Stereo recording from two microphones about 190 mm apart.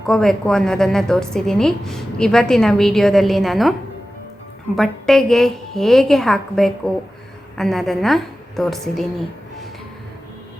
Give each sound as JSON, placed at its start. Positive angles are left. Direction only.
{"t": 0.0, "sound": "a woman's voice", "side_deg": 5}